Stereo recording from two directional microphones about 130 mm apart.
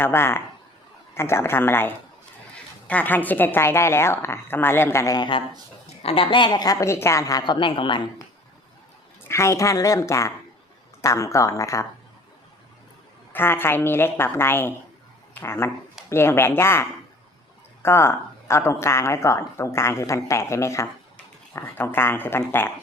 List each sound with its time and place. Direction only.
0.0 s a woman's voice: 20° left (ahead or behind); by 5.4 s 35° left (ahead or behind)
6.0 s a woman's voice: 45° left (ahead or behind)
9.2 s speech: 20° left (ahead or behind)
13.3 s a woman's voice: 15° left (ahead or behind)
17.8 s a woman's voice: 20° left (ahead or behind)